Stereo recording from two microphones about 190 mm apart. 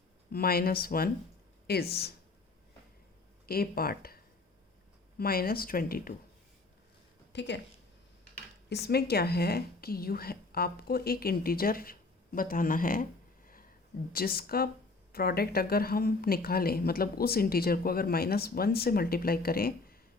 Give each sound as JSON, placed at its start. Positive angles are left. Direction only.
{"t": 0.3, "sound": "a woman's voice", "side_deg": 50}
{"t": 3.4, "sound": "a woman's voice", "side_deg": 50}
{"t": 7.3, "sound": "speech", "side_deg": 65}
{"t": 8.7, "sound": "a woman's voice", "side_deg": 60}
{"t": 14.1, "sound": "a woman's voice", "side_deg": 50}